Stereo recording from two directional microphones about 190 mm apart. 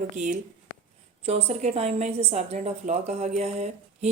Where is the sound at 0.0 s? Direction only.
40° right (ahead or behind).